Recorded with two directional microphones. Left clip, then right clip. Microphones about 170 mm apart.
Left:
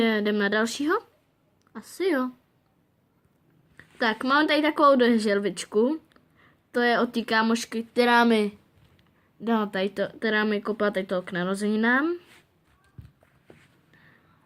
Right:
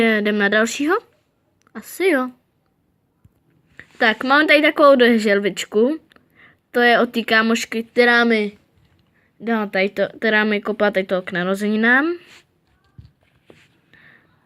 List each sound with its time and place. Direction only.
0.0 s speech: 15° right (ahead or behind)
3.8 s a woman's voice: 15° right (ahead or behind)
7.9 s speech: centre (ahead or behind)
13.0 s walk: 30° left (ahead or behind)
13.9 s a sound: 15° right (ahead or behind)